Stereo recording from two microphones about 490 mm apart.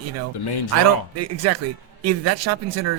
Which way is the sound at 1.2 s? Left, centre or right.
Right.